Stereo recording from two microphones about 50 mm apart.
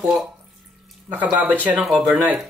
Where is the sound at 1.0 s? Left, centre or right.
Right.